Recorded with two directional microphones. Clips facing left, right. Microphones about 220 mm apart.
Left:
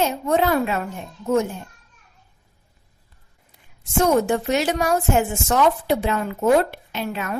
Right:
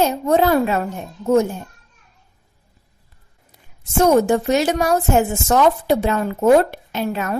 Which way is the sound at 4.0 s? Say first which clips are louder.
Right 4 dB; 45° right (ahead or behind).